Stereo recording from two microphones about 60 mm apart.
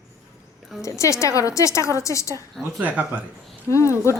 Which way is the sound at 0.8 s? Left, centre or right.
Left.